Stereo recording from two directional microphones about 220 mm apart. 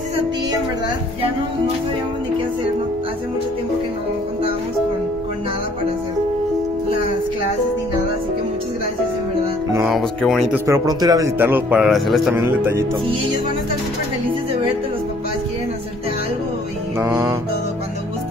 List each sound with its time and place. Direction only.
9.8 s speech: centre (ahead or behind)
10.5 s a man's voice: 15° right (ahead or behind)